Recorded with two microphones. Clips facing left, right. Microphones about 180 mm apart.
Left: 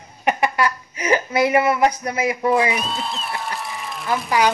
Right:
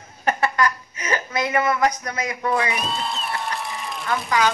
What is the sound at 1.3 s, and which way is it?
Speech, 30° left (ahead or behind).